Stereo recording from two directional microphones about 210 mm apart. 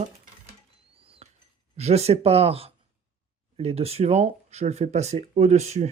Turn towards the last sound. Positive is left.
turn(degrees=-30)  # may be behind; listen again after turning